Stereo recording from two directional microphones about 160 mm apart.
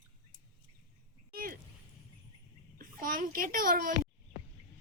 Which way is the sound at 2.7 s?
60° right (ahead or behind).